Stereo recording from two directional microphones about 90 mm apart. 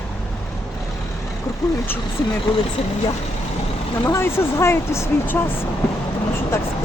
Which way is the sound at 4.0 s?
30° left (ahead or behind).